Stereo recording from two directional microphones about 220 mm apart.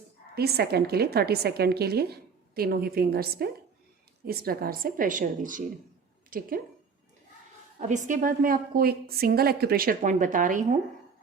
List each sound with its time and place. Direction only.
0.3 s a woman's voice: 45° right (ahead or behind)
7.8 s a woman's voice: 35° right (ahead or behind)